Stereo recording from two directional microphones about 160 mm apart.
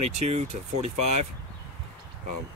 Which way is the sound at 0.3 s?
45° right (ahead or behind).